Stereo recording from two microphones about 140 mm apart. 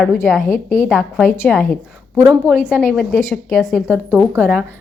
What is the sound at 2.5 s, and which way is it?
A woman's voice, 5° right (ahead or behind).